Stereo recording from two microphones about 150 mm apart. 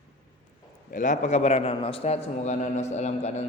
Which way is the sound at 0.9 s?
60° left (ahead or behind).